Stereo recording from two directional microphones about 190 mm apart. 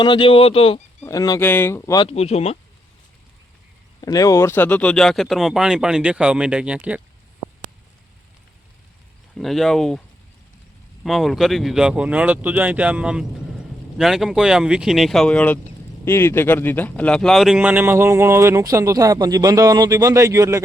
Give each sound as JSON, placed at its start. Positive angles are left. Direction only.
{"t": 0.0, "sound": "speech", "side_deg": 25}
{"t": 1.0, "sound": "speech", "side_deg": 20}
{"t": 2.0, "sound": "speech", "side_deg": 35}
{"t": 4.0, "sound": "speech", "side_deg": 20}
{"t": 9.4, "sound": "speech", "side_deg": 0}
{"t": 11.0, "sound": "speech", "side_deg": 0}